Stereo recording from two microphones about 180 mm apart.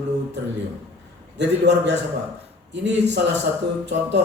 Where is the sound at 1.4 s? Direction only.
75° right (ahead or behind).